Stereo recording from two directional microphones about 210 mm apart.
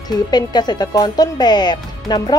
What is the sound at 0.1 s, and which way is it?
Speech, 20° left (ahead or behind).